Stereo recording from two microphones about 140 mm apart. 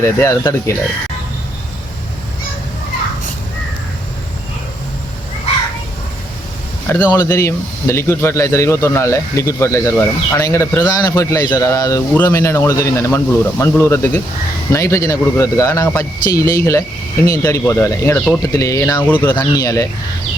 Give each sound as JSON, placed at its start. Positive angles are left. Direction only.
{"t": 0.0, "sound": "speech", "side_deg": 20}
{"t": 6.8, "sound": "speech", "side_deg": 15}
{"t": 19.0, "sound": "speech", "side_deg": 15}
{"t": 19.4, "sound": "speech", "side_deg": 25}